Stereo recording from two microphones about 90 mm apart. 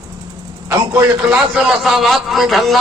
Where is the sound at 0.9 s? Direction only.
25° right (ahead or behind).